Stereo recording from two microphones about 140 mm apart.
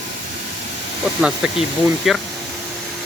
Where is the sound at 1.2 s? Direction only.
5° right (ahead or behind).